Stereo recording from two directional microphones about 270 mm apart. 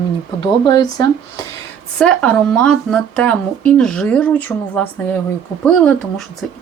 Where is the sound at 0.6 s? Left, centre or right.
Centre.